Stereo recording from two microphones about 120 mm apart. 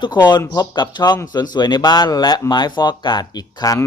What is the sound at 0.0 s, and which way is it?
A man's voice, 40° left (ahead or behind).